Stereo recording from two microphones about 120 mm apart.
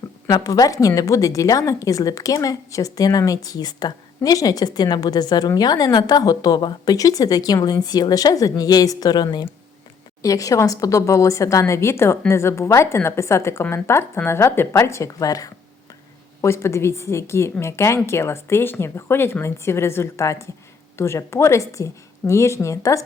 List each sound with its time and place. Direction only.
0.3 s a woman's voice: 30° left (ahead or behind)